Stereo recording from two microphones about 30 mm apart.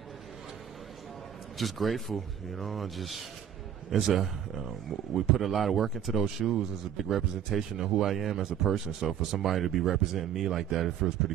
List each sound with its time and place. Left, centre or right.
1.6 s speech: centre